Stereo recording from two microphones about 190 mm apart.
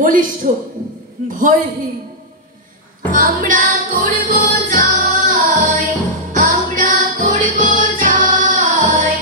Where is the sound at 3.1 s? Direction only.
45° right (ahead or behind).